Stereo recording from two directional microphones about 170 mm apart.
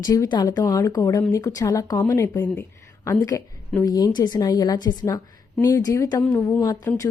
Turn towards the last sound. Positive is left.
turn(degrees=10)  # may be behind; listen again after turning